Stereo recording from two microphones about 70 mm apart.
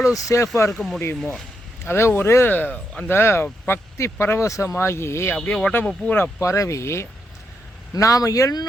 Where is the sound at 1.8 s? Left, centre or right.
Left; by 3.1 s centre.